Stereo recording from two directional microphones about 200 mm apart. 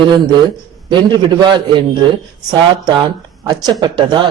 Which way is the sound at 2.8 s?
20° right (ahead or behind).